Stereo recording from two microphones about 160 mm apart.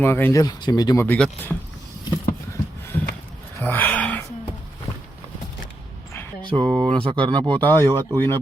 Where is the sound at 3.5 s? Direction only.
10° left (ahead or behind).